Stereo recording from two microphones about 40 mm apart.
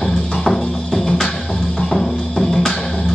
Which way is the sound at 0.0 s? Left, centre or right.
Centre.